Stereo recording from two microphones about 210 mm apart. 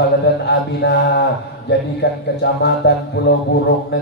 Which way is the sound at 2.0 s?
55° left (ahead or behind).